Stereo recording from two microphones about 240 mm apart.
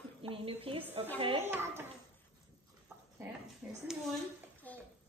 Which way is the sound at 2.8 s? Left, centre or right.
Centre.